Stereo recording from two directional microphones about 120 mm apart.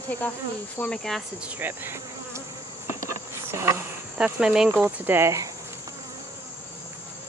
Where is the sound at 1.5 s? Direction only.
15° right (ahead or behind).